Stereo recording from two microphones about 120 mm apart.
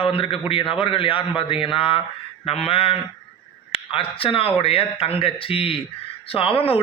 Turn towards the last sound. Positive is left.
turn(degrees=50)  # may be behind; listen again after turning